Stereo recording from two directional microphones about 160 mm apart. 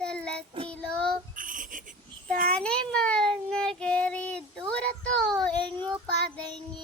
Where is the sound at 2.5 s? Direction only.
5° left (ahead or behind).